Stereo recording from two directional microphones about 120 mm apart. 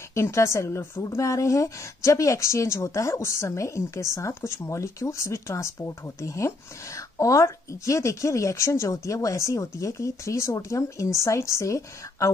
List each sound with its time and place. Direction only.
0.1 s a woman's voice: 25° left (ahead or behind)